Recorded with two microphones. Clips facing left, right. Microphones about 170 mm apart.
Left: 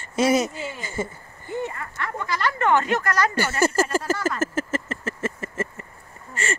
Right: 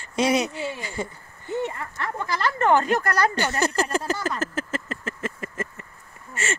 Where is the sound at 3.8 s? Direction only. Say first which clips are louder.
Left 2 dB; centre (ahead or behind).